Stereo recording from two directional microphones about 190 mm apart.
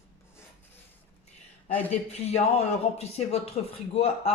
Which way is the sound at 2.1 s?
35° left (ahead or behind).